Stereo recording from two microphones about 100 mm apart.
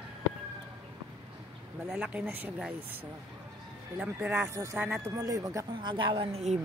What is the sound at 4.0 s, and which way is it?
Speech, 15° right (ahead or behind).